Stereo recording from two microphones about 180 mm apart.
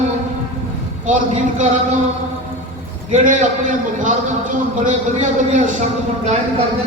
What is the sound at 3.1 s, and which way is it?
A man's voice, 45° right (ahead or behind).